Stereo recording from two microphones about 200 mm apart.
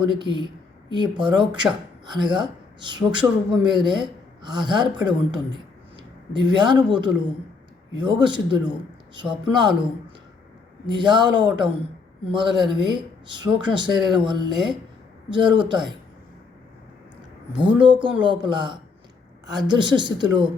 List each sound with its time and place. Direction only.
0.0 s speech: 25° right (ahead or behind)
6.0 s a man's voice: 20° right (ahead or behind)
10.8 s speech: 20° right (ahead or behind)
17.5 s speech: 25° right (ahead or behind)